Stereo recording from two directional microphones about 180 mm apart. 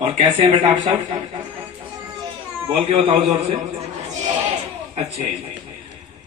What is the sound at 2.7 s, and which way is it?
Speech, 35° right (ahead or behind).